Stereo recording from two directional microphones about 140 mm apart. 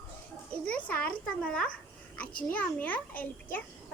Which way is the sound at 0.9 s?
10° left (ahead or behind).